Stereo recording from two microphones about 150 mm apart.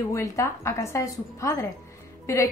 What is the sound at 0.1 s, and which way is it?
A woman's voice, 20° left (ahead or behind).